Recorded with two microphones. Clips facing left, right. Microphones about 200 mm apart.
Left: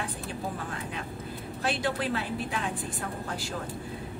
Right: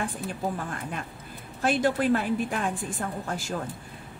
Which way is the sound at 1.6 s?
45° right (ahead or behind).